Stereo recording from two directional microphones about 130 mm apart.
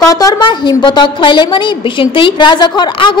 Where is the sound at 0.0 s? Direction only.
25° left (ahead or behind).